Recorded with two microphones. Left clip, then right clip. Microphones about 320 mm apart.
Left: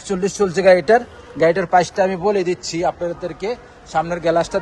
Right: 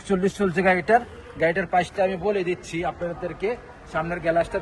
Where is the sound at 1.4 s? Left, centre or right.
Left.